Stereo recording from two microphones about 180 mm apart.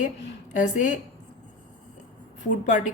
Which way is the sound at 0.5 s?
45° left (ahead or behind).